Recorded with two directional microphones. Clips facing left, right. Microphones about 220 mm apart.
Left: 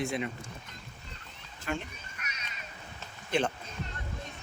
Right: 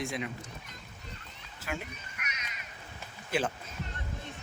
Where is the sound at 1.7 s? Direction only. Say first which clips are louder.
Left 3 dB; 10° right (ahead or behind).